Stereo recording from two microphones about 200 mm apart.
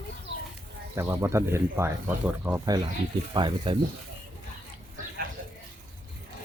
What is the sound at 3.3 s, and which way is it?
Speech, 25° right (ahead or behind).